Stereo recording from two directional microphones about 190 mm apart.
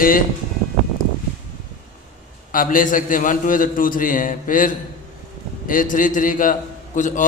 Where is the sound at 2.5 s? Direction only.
45° left (ahead or behind).